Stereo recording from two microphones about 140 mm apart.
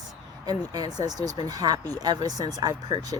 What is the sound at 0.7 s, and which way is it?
Speech, 30° right (ahead or behind).